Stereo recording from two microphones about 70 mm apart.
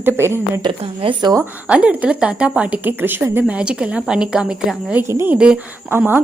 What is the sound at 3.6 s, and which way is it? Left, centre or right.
A woman's voice, centre.